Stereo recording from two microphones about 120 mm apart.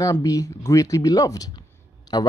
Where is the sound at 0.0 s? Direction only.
30° left (ahead or behind).